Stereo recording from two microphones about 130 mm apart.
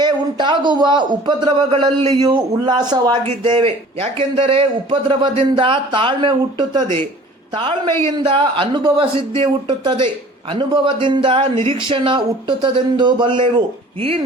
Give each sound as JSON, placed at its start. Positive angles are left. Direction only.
{"t": 0.0, "sound": "a man's voice", "side_deg": -35}